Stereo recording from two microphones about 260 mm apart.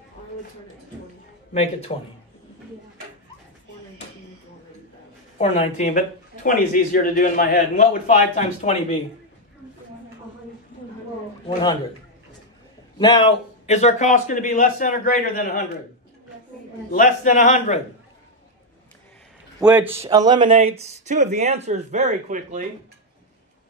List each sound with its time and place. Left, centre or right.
1.5 s a man's voice: left
5.4 s a man's voice: left
11.4 s a man's voice: centre
12.9 s a man's voice: centre; by 15.6 s left
16.9 s a man's voice: left
19.6 s speech: centre; by 22.7 s right